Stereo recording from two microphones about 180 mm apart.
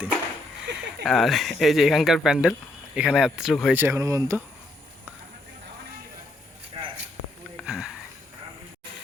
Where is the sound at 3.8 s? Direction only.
15° right (ahead or behind).